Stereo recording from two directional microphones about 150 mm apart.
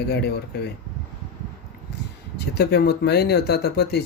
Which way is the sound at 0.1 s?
90° left.